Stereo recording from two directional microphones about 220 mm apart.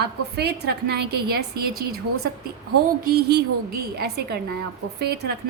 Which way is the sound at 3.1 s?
50° right (ahead or behind).